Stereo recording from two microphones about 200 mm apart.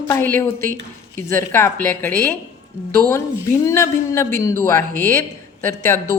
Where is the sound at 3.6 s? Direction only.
15° left (ahead or behind).